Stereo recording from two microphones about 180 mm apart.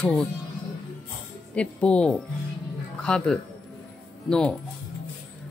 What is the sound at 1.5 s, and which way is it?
Speech, 5° left (ahead or behind).